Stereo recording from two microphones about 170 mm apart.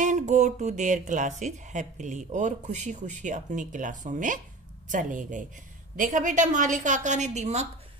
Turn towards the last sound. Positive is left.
turn(degrees=-40)  # may be behind; listen again after turning